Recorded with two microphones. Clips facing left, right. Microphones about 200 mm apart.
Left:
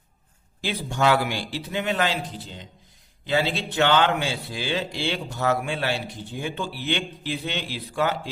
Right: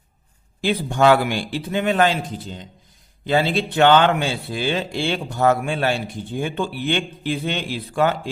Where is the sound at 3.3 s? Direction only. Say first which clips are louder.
Right 5 dB; 50° right (ahead or behind).